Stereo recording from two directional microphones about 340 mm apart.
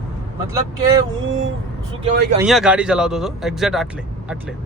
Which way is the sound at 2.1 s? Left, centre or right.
Right.